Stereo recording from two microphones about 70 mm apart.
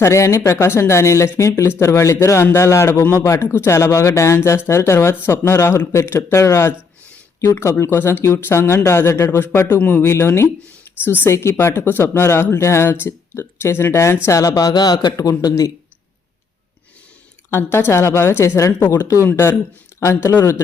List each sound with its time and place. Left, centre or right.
0.0 s speech: left
11.0 s a woman's voice: left
11.3 s speech: left
14.3 s speech: left
15.1 s speech: left
17.5 s speech: left